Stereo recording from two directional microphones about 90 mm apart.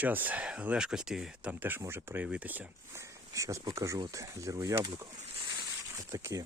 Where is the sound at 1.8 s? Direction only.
30° right (ahead or behind).